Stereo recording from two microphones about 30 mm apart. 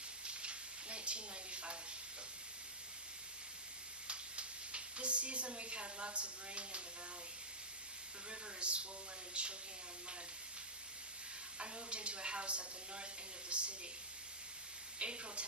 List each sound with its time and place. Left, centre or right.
0.3 s sizzle: right
4.0 s speech: right
8.3 s a woman's voice: right
11.6 s a woman's voice: right
14.9 s a woman's voice: right